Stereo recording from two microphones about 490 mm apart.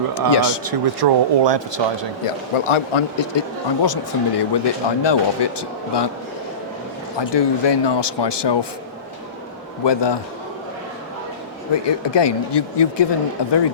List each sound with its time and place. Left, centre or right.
0.3 s speech: left
0.6 s speech: right
2.2 s speech: left
3.8 s speech: left
7.2 s speech: left
9.8 s speech: left
11.7 s speech: left